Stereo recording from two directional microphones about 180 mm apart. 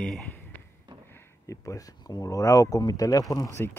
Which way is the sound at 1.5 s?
20° left (ahead or behind).